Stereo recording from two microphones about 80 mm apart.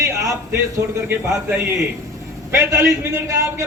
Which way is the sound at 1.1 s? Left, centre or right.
Right.